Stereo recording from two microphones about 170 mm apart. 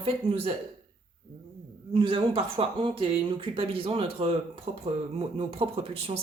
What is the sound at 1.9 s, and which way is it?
Speech, 30° right (ahead or behind).